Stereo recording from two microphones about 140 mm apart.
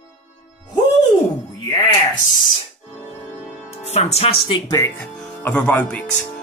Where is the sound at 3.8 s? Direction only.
50° left (ahead or behind).